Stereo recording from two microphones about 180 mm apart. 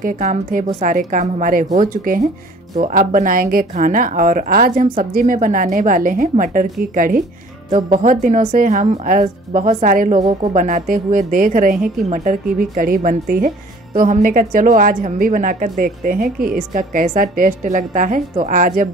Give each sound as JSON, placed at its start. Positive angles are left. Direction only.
{"t": 0.0, "sound": "a woman's voice", "side_deg": -45}